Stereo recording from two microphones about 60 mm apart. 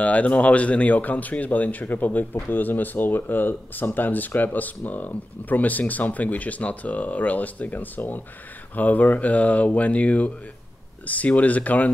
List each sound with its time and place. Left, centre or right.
0.0 s speech: left